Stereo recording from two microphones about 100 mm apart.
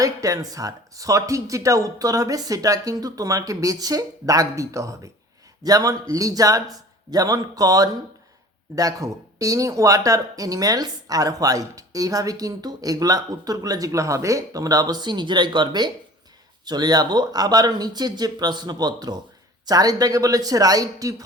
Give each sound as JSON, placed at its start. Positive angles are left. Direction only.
{"t": 0.0, "sound": "speech", "side_deg": -35}